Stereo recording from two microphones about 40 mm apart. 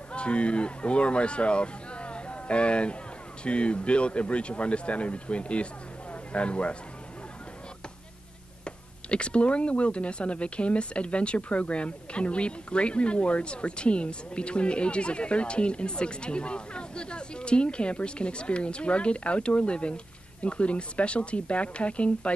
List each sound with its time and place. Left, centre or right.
0.1 s speech: left
8.6 s speech: left